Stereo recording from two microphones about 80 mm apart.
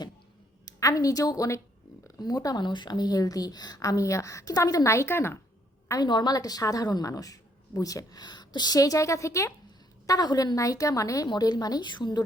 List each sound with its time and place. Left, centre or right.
0.6 s a woman's voice: left
2.6 s a woman's voice: left
6.0 s a woman's voice: left
10.1 s a woman's voice: left
11.3 s a woman's voice: left